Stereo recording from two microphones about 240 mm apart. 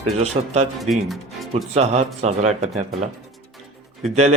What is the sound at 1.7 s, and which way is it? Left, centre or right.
Speech, right.